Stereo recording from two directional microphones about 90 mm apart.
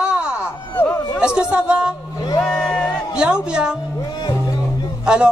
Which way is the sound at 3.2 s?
10° right (ahead or behind).